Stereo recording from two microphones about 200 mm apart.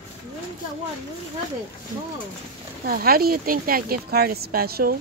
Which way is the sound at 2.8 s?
45° right (ahead or behind).